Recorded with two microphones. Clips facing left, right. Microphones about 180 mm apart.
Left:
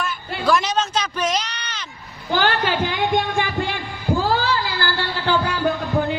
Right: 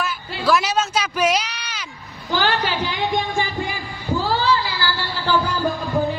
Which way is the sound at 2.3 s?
50° left (ahead or behind).